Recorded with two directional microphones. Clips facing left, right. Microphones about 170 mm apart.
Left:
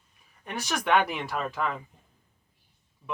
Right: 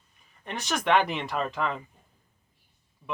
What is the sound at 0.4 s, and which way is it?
Speech, centre (ahead or behind).